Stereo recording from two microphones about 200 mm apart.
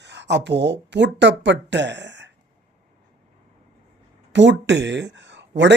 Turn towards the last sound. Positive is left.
turn(degrees=-60)  # may be behind; listen again after turning